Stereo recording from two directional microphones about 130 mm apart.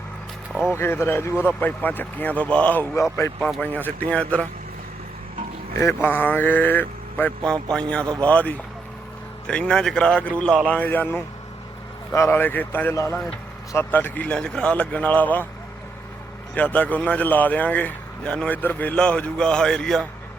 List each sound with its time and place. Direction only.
0.7 s speech: 20° left (ahead or behind)
5.7 s speech: 20° left (ahead or behind)
16.6 s speech: 10° left (ahead or behind)